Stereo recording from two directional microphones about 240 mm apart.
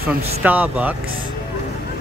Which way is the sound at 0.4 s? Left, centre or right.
Centre.